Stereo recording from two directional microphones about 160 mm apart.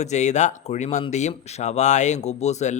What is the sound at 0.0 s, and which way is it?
A man's voice, 45° left (ahead or behind).